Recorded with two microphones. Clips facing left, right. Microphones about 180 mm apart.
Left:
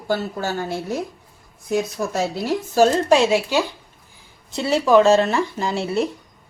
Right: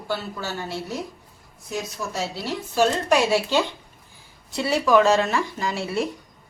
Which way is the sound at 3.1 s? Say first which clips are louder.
Left 3 dB; 20° left (ahead or behind).